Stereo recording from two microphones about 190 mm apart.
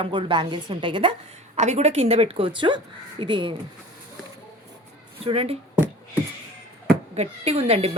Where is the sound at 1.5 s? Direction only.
35° right (ahead or behind).